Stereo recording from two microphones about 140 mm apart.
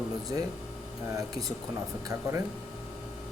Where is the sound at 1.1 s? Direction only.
25° right (ahead or behind).